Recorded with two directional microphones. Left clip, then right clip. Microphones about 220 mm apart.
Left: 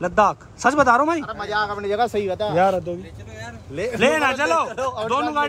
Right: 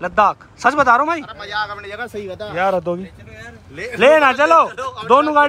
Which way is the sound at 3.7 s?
45° left (ahead or behind).